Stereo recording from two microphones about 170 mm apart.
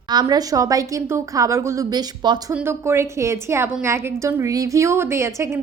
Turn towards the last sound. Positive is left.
turn(degrees=-15)  # may be behind; listen again after turning